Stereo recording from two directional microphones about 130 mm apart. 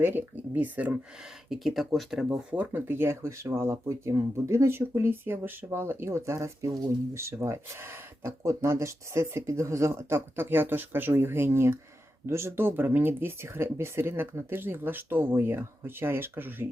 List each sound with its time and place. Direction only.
0.0 s speech: 15° right (ahead or behind)
1.5 s speech: centre (ahead or behind)